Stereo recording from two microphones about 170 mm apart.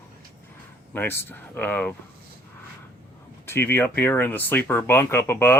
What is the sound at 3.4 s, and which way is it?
Speech, 15° left (ahead or behind).